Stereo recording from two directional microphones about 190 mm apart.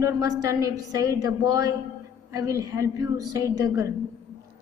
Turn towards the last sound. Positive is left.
turn(degrees=-15)  # may be behind; listen again after turning